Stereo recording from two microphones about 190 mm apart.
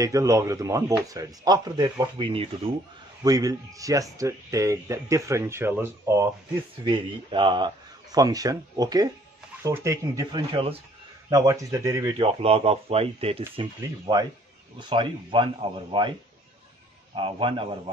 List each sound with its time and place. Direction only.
0.0 s speech: 15° right (ahead or behind)
3.3 s speech: 20° right (ahead or behind)
6.8 s speech: 25° right (ahead or behind)
12.2 s speech: 30° right (ahead or behind)
13.6 s speech: 20° right (ahead or behind)